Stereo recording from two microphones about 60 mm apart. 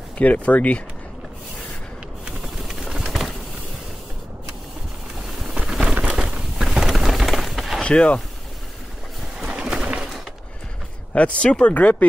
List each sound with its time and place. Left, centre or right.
0.2 s speech: left
2.2 s pigeon: centre
5.6 s a sound: centre
7.8 s speech: centre
9.4 s bird: centre
11.1 s speech: centre